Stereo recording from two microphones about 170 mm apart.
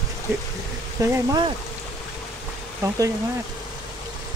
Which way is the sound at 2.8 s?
20° right (ahead or behind).